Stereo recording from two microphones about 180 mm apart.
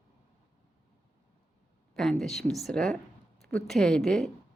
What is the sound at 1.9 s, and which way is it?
Speech, centre (ahead or behind).